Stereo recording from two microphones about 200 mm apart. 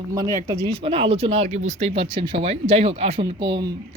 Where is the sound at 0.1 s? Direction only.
15° right (ahead or behind).